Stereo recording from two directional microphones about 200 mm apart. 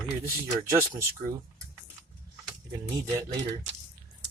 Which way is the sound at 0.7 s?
15° right (ahead or behind).